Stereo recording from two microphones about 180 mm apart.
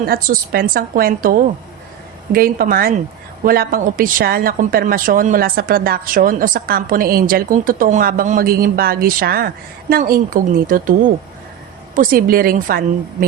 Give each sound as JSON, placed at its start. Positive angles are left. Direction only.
{"t": 0.0, "sound": "a woman's voice", "side_deg": -55}
{"t": 11.9, "sound": "a woman's voice", "side_deg": -55}